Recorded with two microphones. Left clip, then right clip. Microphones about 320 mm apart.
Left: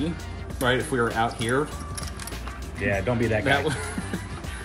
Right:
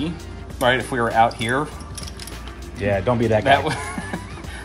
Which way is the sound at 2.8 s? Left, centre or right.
Right.